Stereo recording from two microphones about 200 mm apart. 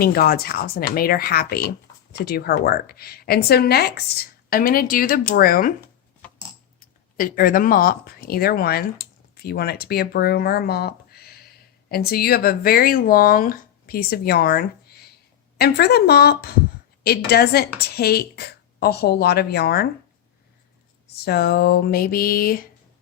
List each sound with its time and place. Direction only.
0.0 s speech: 50° left (ahead or behind)
6.7 s speech: 45° left (ahead or behind)
21.2 s speech: 55° left (ahead or behind)